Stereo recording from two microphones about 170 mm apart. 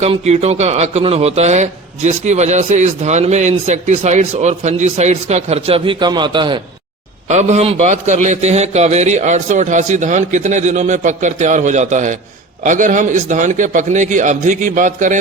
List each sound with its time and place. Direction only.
0.0 s speech: 40° right (ahead or behind)
7.3 s a man's voice: 40° right (ahead or behind)